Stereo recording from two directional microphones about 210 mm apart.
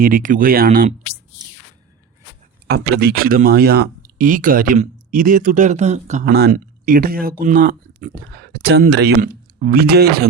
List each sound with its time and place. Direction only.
0.0 s speech: 40° right (ahead or behind)
2.6 s speech: 50° right (ahead or behind)
9.2 s speech: 40° right (ahead or behind)